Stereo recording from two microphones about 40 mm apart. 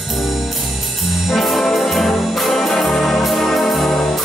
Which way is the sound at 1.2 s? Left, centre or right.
Centre.